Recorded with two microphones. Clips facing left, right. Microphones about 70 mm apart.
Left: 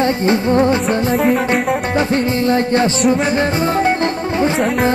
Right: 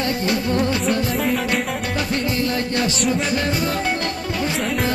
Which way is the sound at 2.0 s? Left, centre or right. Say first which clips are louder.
Left 4 dB; left.